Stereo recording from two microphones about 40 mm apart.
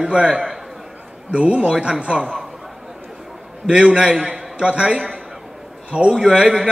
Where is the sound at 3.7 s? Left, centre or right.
Right.